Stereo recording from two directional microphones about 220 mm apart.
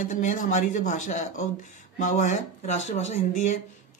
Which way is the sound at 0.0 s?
35° left (ahead or behind).